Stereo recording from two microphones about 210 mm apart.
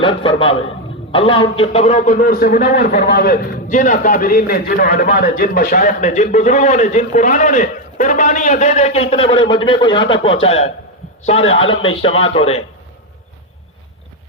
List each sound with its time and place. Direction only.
0.0 s a man's voice: 25° left (ahead or behind)